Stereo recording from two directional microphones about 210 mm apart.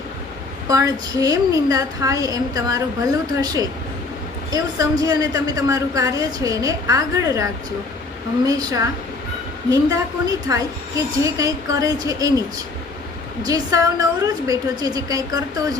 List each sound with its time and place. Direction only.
0.7 s a woman's voice: 15° right (ahead or behind)
13.4 s a woman's voice: 15° right (ahead or behind)